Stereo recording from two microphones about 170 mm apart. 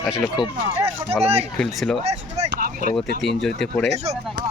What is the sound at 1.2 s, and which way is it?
Speech, 40° right (ahead or behind).